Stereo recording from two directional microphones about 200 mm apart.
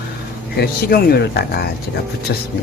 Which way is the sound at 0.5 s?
50° left (ahead or behind).